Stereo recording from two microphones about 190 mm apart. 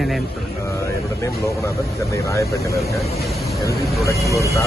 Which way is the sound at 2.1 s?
15° left (ahead or behind).